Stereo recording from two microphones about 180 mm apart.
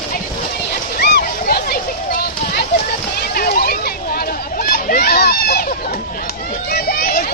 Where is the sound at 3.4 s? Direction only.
55° left (ahead or behind).